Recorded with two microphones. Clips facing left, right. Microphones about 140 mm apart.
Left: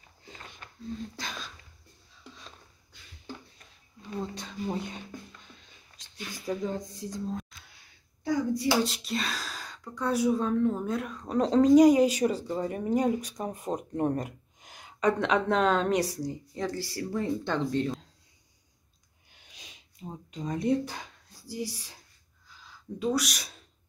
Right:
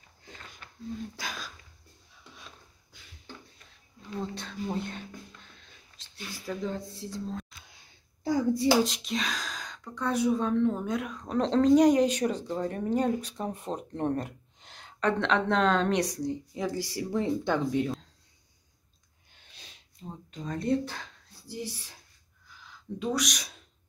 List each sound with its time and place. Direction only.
1.1 s speech: 5° right (ahead or behind)
4.2 s speech: 10° left (ahead or behind)
6.3 s speech: 15° left (ahead or behind)
8.2 s hands: 30° right (ahead or behind)
8.8 s speech: 5° left (ahead or behind)
16.5 s speech: 15° right (ahead or behind)
19.3 s snort: 10° left (ahead or behind)
20.3 s speech: 15° left (ahead or behind)
22.6 s a sound: 10° left (ahead or behind)
23.0 s speech: 5° left (ahead or behind)